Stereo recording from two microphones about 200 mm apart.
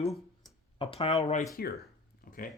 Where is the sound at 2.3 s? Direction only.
45° left (ahead or behind).